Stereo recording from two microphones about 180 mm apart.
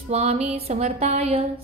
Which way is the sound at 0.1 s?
35° right (ahead or behind).